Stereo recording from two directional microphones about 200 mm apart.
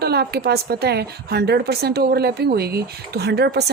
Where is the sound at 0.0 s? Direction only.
55° right (ahead or behind).